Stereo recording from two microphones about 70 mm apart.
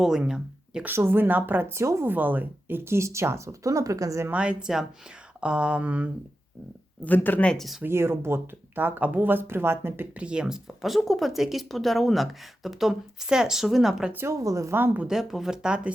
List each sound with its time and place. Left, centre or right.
0.0 s speech: centre
0.9 s speech: right
2.0 s speech: right
4.3 s speech: centre
7.0 s speech: left
7.4 s speech: centre
7.9 s speech: right
10.2 s speech: centre
14.3 s a woman's voice: right
15.0 s speech: centre